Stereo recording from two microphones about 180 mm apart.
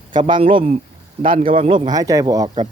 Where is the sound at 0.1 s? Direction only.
25° right (ahead or behind).